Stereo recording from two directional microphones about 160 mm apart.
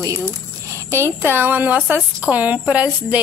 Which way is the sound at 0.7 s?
15° right (ahead or behind).